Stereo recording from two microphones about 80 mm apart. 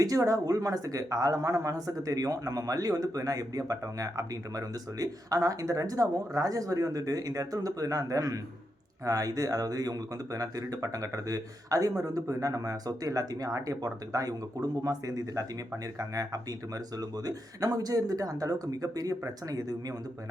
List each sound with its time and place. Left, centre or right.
0.0 s speech: right